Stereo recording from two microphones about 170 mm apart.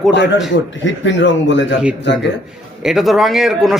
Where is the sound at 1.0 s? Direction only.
90° left.